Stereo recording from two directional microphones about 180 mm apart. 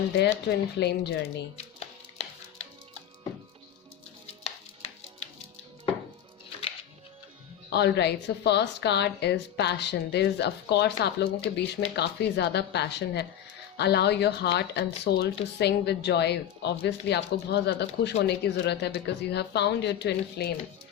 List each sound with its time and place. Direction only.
0.2 s speech: 65° left (ahead or behind)
1.5 s music: 35° left (ahead or behind)
4.4 s music: 35° left (ahead or behind)
7.7 s speech: 70° left (ahead or behind)